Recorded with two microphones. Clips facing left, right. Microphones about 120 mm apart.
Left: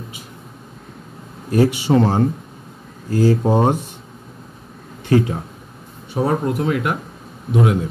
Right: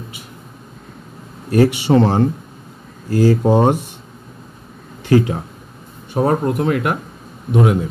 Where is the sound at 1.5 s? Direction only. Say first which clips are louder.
Right 2 dB; 70° right (ahead or behind).